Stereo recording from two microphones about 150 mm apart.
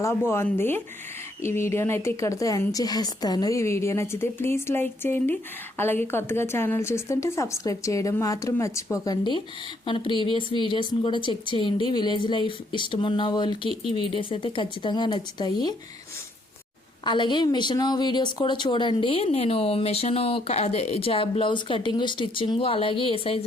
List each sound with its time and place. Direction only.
0.3 s speech: 15° left (ahead or behind)
9.8 s speech: 35° left (ahead or behind)
17.0 s speech: 30° left (ahead or behind)